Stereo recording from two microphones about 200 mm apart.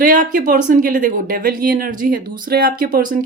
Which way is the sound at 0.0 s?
40° right (ahead or behind).